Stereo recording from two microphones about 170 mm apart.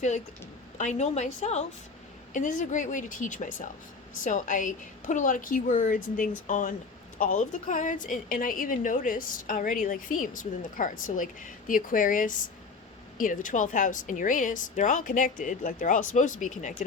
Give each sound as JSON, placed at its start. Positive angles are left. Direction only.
{"t": 0.8, "sound": "a woman's voice", "side_deg": 45}